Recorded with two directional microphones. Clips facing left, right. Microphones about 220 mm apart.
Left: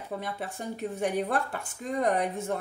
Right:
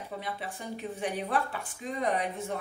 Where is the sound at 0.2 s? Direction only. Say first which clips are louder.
Left 3 dB; 45° left (ahead or behind).